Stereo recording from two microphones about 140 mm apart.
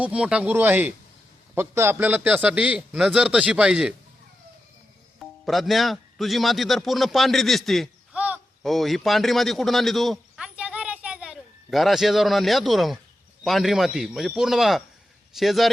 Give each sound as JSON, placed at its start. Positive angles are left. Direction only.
{"t": 0.0, "sound": "a man's voice", "side_deg": -10}
{"t": 5.2, "sound": "a man's voice", "side_deg": 0}
{"t": 8.1, "sound": "a sound", "side_deg": -10}
{"t": 8.6, "sound": "a man's voice", "side_deg": 0}